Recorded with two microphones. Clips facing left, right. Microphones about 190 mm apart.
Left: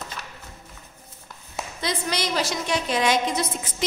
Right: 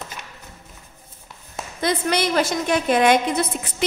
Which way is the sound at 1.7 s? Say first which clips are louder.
Right 7 dB; 55° right (ahead or behind).